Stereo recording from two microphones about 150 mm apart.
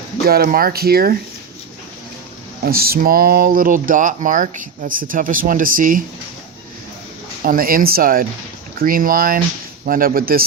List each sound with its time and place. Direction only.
0.3 s speech: 80° right
2.6 s speech: 90° right; by 6.0 s 65° right (ahead or behind)
7.4 s speech: 70° right (ahead or behind)